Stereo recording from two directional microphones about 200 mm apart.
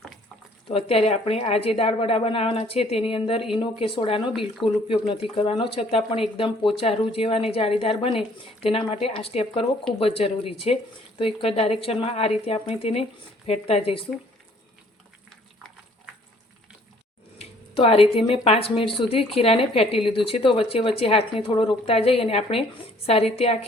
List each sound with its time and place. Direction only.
0.7 s speech: 30° left (ahead or behind)
17.3 s a woman's voice: 30° left (ahead or behind)